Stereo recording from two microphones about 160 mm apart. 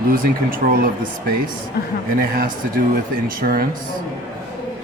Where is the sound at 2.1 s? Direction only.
65° right (ahead or behind).